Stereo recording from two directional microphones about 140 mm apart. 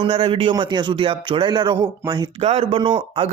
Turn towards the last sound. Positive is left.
turn(degrees=-40)  # may be behind; listen again after turning